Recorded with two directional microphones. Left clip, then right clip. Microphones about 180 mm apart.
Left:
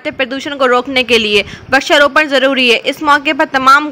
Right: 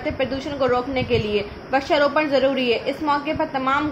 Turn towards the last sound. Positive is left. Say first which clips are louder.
# left 13 dB
turn(degrees=45)  # may be behind; listen again after turning